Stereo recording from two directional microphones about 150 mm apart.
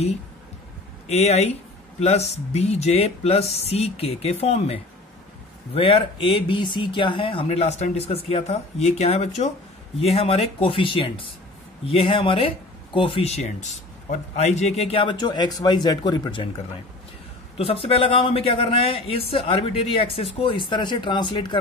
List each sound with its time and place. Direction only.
1.0 s speech: 45° left (ahead or behind)
5.8 s speech: 35° left (ahead or behind)
17.6 s speech: 40° left (ahead or behind)